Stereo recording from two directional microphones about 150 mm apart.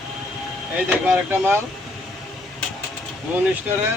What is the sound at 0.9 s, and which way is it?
Speech, 10° right (ahead or behind).